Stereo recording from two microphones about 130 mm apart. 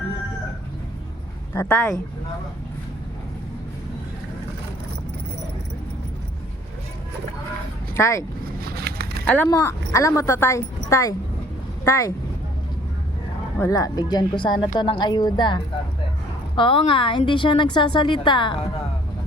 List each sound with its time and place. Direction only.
1.5 s speech: 10° left (ahead or behind)
7.9 s speech: 20° left (ahead or behind)
9.2 s speech: 10° left (ahead or behind)
9.5 s speech: 25° left (ahead or behind)
13.6 s a woman's voice: 25° left (ahead or behind)